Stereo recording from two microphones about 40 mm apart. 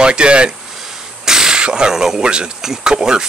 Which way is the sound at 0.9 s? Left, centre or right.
Centre.